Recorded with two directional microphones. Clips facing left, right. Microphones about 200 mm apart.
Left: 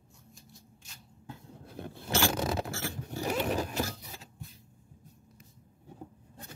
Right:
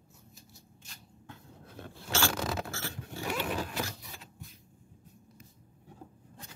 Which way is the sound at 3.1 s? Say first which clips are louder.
Left 4 dB; 40° left (ahead or behind).